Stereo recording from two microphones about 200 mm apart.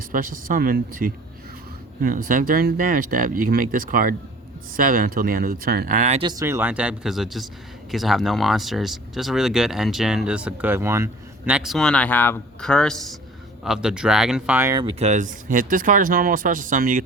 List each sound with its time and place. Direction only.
0.1 s speech: 45° right (ahead or behind)
6.2 s speech: 15° right (ahead or behind)
14.8 s speech: 30° right (ahead or behind)